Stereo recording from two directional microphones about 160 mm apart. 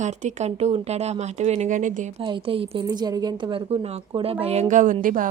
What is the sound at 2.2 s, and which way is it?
Speech, 30° right (ahead or behind).